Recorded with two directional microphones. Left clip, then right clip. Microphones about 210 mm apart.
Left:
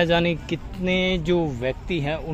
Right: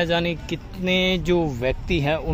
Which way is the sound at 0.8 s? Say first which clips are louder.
Right 2 dB; 5° right (ahead or behind).